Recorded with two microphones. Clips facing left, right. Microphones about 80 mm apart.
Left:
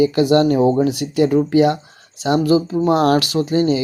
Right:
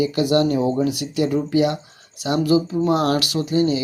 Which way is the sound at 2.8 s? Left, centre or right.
Left.